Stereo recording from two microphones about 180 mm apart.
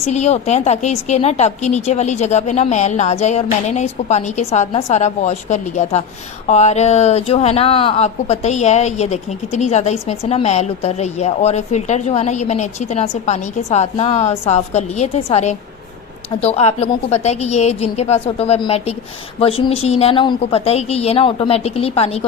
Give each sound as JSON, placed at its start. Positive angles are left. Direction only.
{"t": 0.0, "sound": "speech", "side_deg": 40}